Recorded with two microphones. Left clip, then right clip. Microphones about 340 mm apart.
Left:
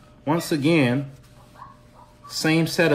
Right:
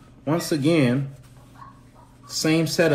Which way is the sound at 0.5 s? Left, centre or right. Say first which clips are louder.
Even; left.